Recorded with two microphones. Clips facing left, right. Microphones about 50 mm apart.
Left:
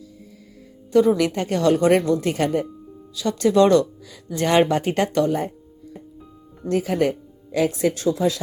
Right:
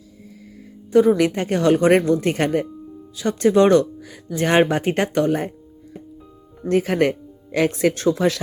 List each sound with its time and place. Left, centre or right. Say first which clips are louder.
0.9 s speech: right 2 dB; right
2.0 s speech: right 2 dB; right
2.2 s speech: right 2 dB; right
3.2 s speech: right 1 dB; right
6.7 s speech: right 2 dB; right
7.9 s speech: right 2 dB; right